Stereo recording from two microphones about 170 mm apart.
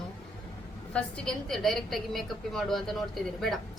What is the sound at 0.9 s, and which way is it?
A woman's voice, 5° left (ahead or behind).